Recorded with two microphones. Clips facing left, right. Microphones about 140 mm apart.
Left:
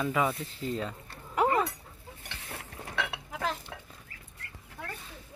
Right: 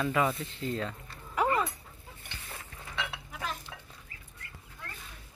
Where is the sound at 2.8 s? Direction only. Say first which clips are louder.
Left 3 dB; 55° left (ahead or behind).